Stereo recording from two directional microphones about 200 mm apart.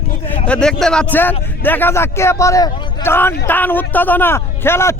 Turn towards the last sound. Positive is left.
turn(degrees=10)  # may be behind; listen again after turning